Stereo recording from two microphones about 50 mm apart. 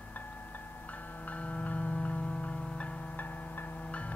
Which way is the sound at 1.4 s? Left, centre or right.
Left.